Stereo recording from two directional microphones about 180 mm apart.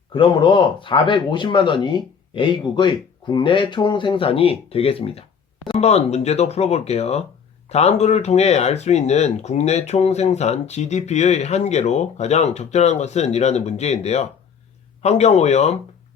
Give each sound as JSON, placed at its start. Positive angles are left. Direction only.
{"t": 0.1, "sound": "speech", "side_deg": 25}